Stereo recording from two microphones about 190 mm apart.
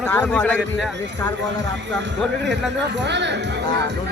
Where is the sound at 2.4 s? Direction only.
65° right (ahead or behind).